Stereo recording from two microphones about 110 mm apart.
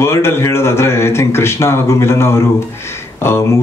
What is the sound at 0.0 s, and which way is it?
Speech, 25° left (ahead or behind).